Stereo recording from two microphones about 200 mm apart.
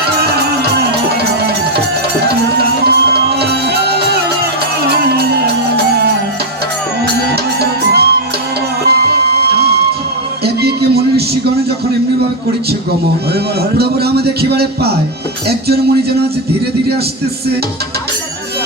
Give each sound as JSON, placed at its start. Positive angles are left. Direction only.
{"t": 2.8, "sound": "music", "side_deg": -55}
{"t": 5.7, "sound": "music", "side_deg": -55}
{"t": 13.7, "sound": "a man's voice", "side_deg": -55}